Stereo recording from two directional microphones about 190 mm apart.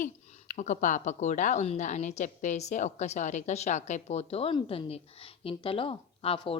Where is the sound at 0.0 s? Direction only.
40° left (ahead or behind).